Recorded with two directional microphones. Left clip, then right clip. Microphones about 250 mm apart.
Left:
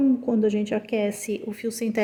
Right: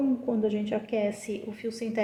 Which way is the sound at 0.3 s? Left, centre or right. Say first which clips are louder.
Left 5 dB; left.